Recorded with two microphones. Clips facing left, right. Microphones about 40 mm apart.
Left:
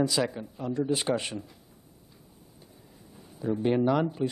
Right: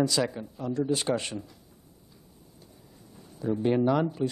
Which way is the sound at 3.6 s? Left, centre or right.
Centre.